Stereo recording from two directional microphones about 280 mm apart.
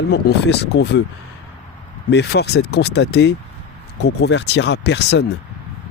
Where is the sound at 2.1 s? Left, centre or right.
Left.